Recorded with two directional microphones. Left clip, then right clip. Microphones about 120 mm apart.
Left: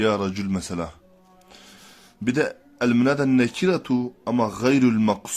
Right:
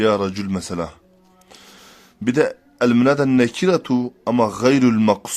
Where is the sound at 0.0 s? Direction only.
30° right (ahead or behind).